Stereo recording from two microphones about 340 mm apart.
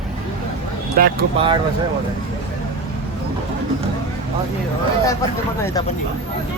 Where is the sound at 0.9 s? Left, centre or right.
Right.